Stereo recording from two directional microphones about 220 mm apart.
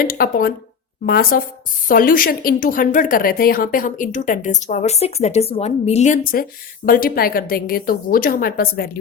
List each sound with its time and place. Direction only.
0.0 s a woman's voice: 40° left (ahead or behind)